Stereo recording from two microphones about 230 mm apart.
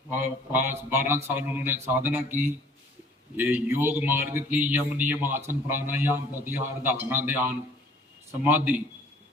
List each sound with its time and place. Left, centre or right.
0.1 s a man's voice: centre
3.3 s a man's voice: centre